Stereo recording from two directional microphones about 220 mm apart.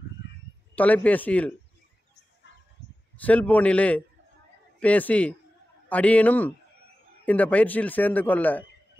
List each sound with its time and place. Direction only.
0.7 s a man's voice: 5° left (ahead or behind)
2.5 s a sound: 50° left (ahead or behind)
3.2 s a man's voice: 5° left (ahead or behind)